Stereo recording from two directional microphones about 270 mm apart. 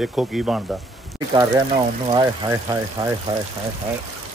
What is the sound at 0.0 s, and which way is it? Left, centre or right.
Speech, centre.